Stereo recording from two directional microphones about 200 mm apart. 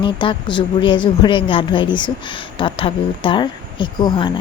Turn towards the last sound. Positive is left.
turn(degrees=20)  # may be behind; listen again after turning